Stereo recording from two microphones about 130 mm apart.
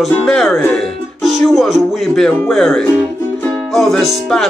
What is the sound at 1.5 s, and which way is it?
Music, centre (ahead or behind).